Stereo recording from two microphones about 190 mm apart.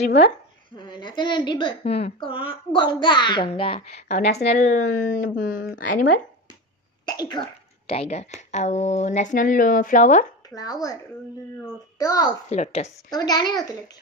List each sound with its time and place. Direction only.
0.7 s a woman's voice: 25° left (ahead or behind)
4.2 s a woman's voice: 65° left (ahead or behind)
4.5 s a woman's voice: 35° left (ahead or behind)
7.1 s a woman's voice: 20° left (ahead or behind); by 10.2 s 40° left (ahead or behind)
10.5 s speech: 20° left (ahead or behind)
12.0 s a woman's voice: 20° left (ahead or behind)
12.4 s a woman's voice: 35° left (ahead or behind)
13.1 s a woman's voice: 20° left (ahead or behind)